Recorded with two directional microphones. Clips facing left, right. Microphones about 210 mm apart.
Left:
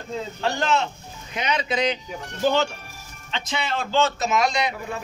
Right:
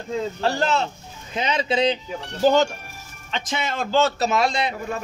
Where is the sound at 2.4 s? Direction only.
40° right (ahead or behind).